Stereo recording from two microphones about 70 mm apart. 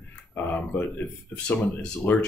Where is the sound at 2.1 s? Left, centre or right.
Left.